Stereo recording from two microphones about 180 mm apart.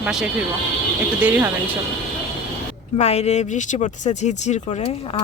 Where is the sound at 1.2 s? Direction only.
10° right (ahead or behind).